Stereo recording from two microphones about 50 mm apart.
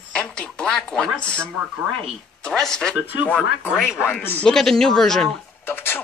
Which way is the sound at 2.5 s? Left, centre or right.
Centre.